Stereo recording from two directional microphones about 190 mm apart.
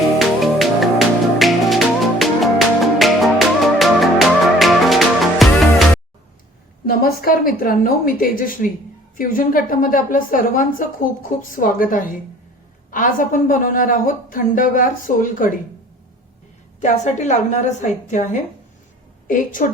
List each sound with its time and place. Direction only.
0.2 s music: centre (ahead or behind)
6.8 s a woman's voice: 50° left (ahead or behind)
16.8 s a woman's voice: 40° left (ahead or behind)